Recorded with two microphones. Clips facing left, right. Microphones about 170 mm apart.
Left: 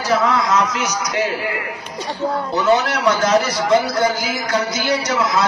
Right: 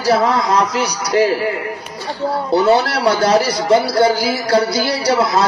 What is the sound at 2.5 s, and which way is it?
A man's voice, 35° right (ahead or behind).